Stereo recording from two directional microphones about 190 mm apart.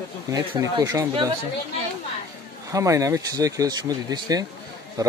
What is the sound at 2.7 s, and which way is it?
Speech, 15° right (ahead or behind).